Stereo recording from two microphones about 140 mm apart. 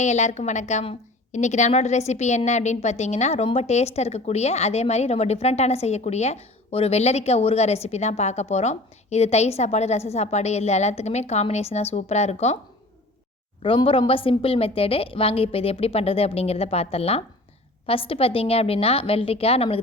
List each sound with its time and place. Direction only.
0.0 s a woman's voice: 55° left (ahead or behind)
13.6 s a woman's voice: 40° left (ahead or behind)